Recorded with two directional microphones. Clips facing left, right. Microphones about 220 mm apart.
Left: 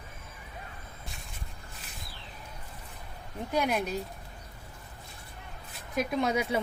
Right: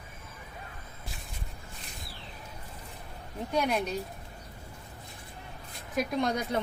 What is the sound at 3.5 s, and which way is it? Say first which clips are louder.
Speech: even; 5° left (ahead or behind).